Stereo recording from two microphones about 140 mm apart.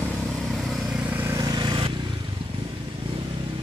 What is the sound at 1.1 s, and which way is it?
Vehicle, 20° right (ahead or behind).